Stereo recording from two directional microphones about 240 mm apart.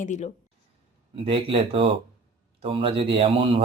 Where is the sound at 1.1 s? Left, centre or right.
Right.